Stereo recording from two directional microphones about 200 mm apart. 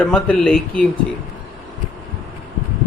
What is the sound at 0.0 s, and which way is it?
Speech, 5° left (ahead or behind).